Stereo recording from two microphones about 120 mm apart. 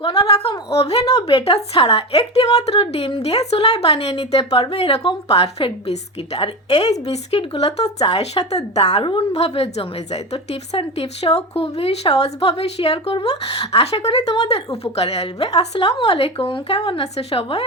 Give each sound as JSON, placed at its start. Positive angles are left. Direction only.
{"t": 0.0, "sound": "a woman's voice", "side_deg": 55}
{"t": 9.0, "sound": "a woman's voice", "side_deg": 50}
{"t": 17.0, "sound": "a woman's voice", "side_deg": 55}